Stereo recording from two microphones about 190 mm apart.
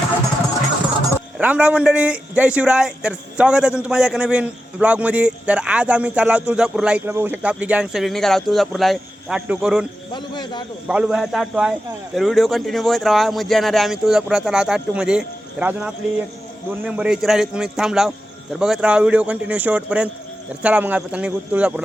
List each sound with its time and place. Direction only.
1.1 s a man's voice: 10° right (ahead or behind)
10.1 s a man's voice: 25° left (ahead or behind)
10.8 s a man's voice: 5° right (ahead or behind)